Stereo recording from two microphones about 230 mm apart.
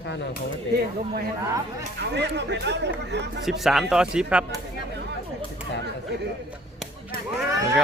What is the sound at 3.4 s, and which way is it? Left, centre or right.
Speech, centre.